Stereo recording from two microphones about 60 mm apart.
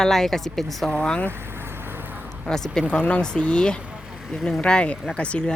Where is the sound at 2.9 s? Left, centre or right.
Centre.